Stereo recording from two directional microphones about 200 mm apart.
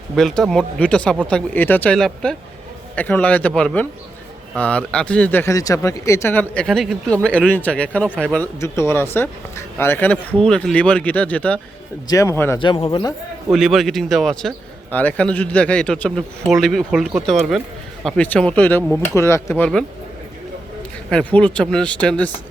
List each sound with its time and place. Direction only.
0.2 s speech: centre (ahead or behind)
12.5 s speech: 25° left (ahead or behind)
13.5 s speech: centre (ahead or behind)
21.1 s speech: 5° left (ahead or behind)